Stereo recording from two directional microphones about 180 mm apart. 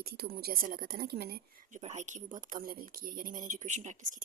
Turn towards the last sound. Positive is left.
turn(degrees=-45)  # may be behind; listen again after turning